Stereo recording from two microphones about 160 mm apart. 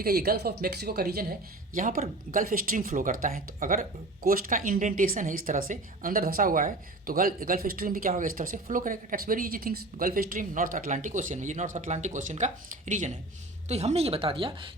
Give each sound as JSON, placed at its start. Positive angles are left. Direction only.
{"t": 0.0, "sound": "speech", "side_deg": -70}